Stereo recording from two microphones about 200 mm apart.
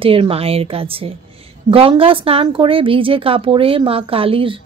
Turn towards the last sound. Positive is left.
turn(degrees=-25)  # may be behind; listen again after turning